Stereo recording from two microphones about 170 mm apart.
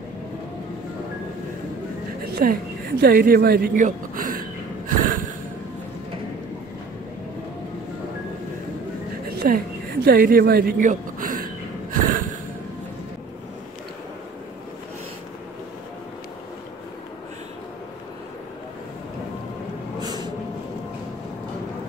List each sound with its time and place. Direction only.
2.4 s a woman's voice: 55° right (ahead or behind)
3.0 s a sound: 60° right (ahead or behind)
9.4 s a woman's voice: 55° right (ahead or behind)
11.9 s snort: 55° right (ahead or behind)
20.0 s vehicle: 25° right (ahead or behind)